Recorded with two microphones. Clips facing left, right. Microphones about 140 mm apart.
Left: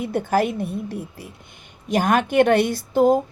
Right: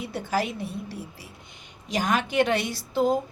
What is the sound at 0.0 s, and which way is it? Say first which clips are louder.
A woman's voice: left 7 dB; 55° left (ahead or behind).